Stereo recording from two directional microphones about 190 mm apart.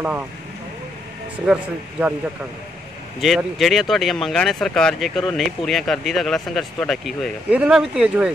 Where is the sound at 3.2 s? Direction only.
Centre (ahead or behind).